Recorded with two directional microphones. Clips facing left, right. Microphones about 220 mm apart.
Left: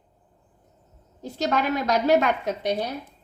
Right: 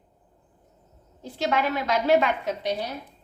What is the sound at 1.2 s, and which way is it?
A woman's voice, 40° left (ahead or behind).